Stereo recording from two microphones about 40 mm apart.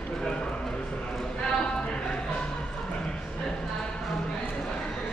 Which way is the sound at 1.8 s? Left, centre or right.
Left.